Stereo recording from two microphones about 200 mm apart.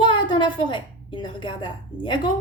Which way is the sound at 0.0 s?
25° left (ahead or behind).